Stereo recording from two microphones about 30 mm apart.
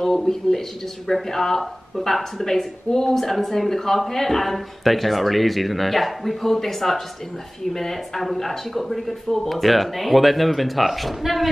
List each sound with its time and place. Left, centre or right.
0.0 s speech: centre
2.4 s speech: centre